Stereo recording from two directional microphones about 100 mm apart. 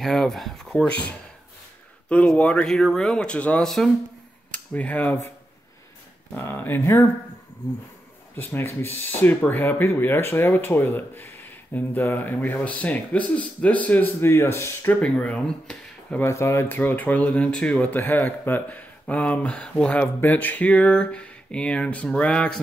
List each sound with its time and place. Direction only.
0.0 s speech: 5° left (ahead or behind)
4.5 s speech: 15° left (ahead or behind)
6.3 s speech: 20° left (ahead or behind)
8.4 s speech: 20° left (ahead or behind)
15.0 s speech: 10° left (ahead or behind)
16.2 s speech: 30° left (ahead or behind); by 22.6 s 10° left (ahead or behind)